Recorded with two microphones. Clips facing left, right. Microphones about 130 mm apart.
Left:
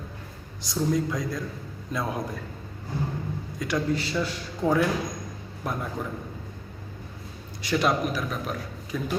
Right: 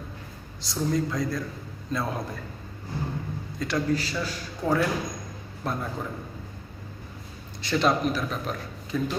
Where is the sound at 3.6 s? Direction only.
20° left (ahead or behind).